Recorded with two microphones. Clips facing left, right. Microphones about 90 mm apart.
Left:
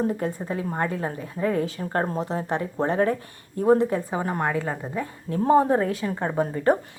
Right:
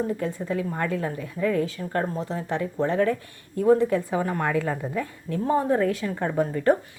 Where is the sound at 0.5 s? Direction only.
30° left (ahead or behind).